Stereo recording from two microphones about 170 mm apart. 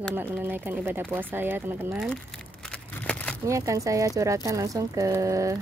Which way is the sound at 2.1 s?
5° left (ahead or behind).